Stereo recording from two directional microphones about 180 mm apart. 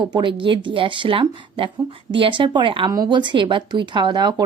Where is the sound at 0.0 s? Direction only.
25° right (ahead or behind).